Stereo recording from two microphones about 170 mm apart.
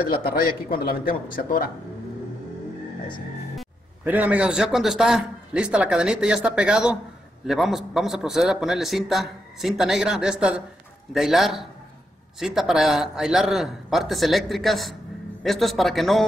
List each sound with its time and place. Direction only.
0.2 s speech: 60° left (ahead or behind)
4.0 s speech: 10° right (ahead or behind)